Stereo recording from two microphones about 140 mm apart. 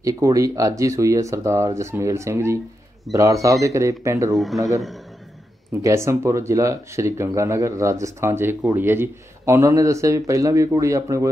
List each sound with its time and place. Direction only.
0.0 s speech: 25° right (ahead or behind)